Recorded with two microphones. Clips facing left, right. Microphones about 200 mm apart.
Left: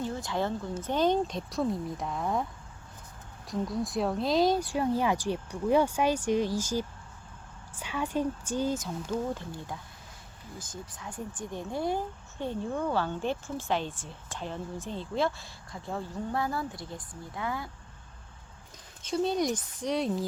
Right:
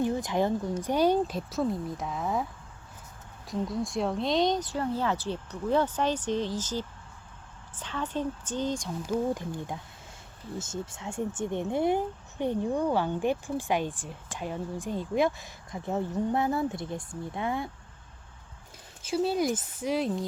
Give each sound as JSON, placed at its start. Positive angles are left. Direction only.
{"t": 0.0, "sound": "a woman's voice", "side_deg": -15}
{"t": 9.0, "sound": "speech", "side_deg": -15}
{"t": 19.0, "sound": "speech", "side_deg": -5}